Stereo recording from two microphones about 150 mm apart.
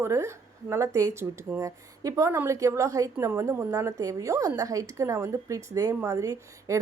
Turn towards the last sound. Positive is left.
turn(degrees=-20)  # may be behind; listen again after turning